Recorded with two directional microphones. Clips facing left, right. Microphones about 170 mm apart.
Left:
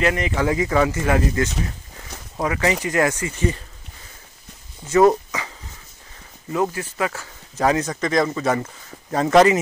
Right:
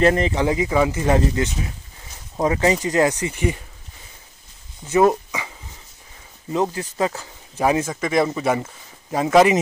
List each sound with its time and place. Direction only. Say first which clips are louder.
0.0 s speech: right 4 dB; 35° right (ahead or behind)
0.3 s speech: even; 20° right (ahead or behind)
4.8 s speech: left 1 dB; 10° right (ahead or behind)
6.5 s speech: right 1 dB; 20° right (ahead or behind)